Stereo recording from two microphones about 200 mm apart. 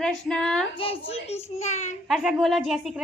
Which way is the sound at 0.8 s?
30° left (ahead or behind).